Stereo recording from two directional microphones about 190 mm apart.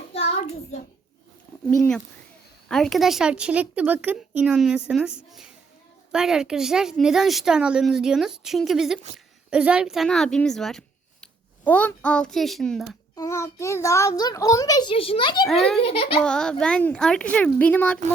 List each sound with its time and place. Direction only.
2.6 s a woman's voice: 5° left (ahead or behind)
13.1 s a child's voice: 15° left (ahead or behind)
15.4 s speech: centre (ahead or behind)
15.8 s a child's voice: 30° left (ahead or behind)
16.2 s speech: 5° left (ahead or behind)